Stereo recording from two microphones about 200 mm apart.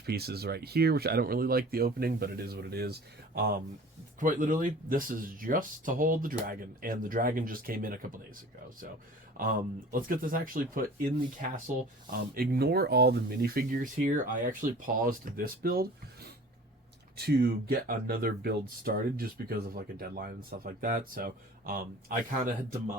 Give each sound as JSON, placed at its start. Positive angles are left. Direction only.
{"t": 0.0, "sound": "speech", "side_deg": -55}
{"t": 9.4, "sound": "speech", "side_deg": -45}